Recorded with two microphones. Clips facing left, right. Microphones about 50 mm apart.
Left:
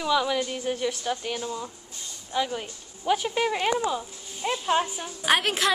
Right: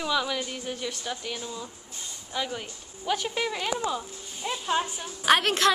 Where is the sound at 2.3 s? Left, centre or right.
Centre.